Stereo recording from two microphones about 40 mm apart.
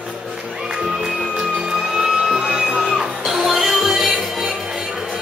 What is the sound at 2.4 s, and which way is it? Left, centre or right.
Music, right.